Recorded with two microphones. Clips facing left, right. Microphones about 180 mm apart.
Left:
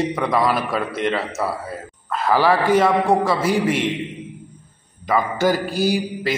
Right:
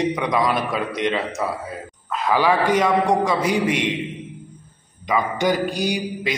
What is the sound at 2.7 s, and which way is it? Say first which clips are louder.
Speech: left 2 dB; 5° left (ahead or behind).